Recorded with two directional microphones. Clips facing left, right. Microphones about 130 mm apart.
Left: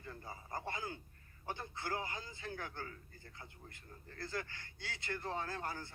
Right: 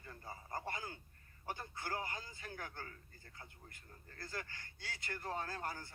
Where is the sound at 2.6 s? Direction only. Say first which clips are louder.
Left 3 dB; 45° right (ahead or behind).